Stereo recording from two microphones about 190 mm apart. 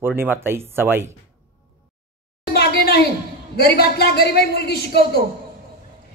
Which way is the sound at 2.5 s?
55° left (ahead or behind).